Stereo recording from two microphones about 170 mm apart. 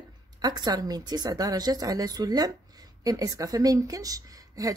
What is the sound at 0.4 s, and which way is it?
A woman's voice, 25° right (ahead or behind).